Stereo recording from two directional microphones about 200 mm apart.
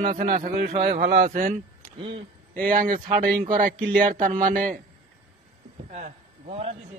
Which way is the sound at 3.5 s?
40° right (ahead or behind).